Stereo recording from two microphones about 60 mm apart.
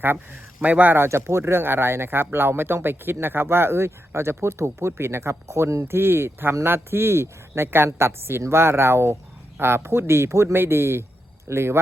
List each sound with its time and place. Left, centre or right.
0.6 s speech: right
0.9 s speech: right